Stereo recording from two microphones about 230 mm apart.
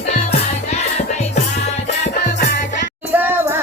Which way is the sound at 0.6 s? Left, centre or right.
Left.